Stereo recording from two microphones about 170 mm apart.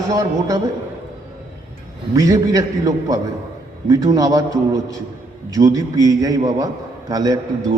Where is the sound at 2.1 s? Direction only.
20° right (ahead or behind).